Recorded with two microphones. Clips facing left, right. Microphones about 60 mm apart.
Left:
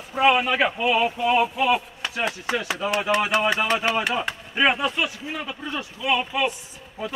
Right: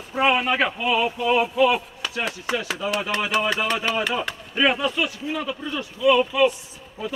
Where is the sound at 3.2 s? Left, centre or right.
Centre.